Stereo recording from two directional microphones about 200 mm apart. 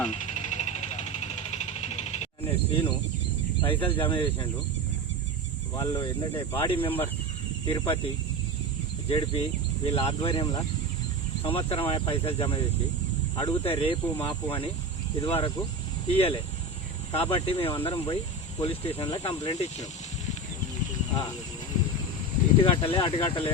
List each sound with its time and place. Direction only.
0.1 s vehicle: 35° left (ahead or behind)
3.6 s speech: 25° left (ahead or behind)
5.7 s speech: 15° left (ahead or behind)
9.0 s speech: 30° left (ahead or behind)
22.6 s speech: 25° left (ahead or behind)